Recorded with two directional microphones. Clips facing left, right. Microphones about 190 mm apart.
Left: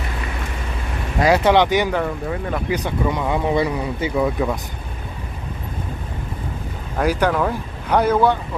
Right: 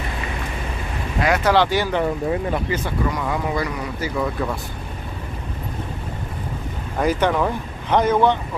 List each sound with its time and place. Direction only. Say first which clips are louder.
1.2 s speech: left 4 dB; 30° left (ahead or behind)
1.5 s speech: left 2 dB; 20° left (ahead or behind)
7.0 s speech: even; 5° left (ahead or behind)